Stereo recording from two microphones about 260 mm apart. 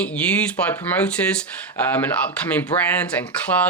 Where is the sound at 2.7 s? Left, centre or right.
Left.